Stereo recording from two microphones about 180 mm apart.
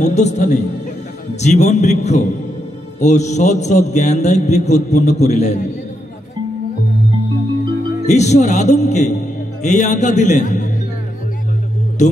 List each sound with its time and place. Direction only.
0.0 s a man's voice: 40° left (ahead or behind)
8.0 s a man's voice: 40° left (ahead or behind)